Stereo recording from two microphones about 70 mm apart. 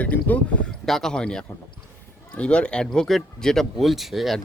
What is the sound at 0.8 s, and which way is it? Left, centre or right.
Speech, centre.